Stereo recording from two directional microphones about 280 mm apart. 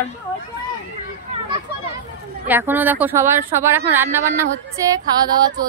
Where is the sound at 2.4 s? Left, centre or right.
Centre.